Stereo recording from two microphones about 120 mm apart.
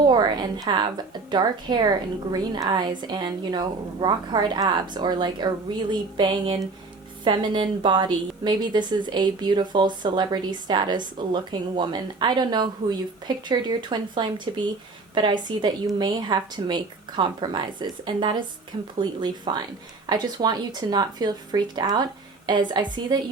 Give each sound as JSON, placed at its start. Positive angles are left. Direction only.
{"t": 0.0, "sound": "a woman's voice", "side_deg": -35}